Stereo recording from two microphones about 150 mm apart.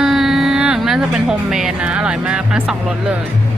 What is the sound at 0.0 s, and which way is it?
Speech, centre (ahead or behind).